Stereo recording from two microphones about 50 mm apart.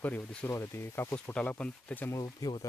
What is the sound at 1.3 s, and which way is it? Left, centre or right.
Speech, left.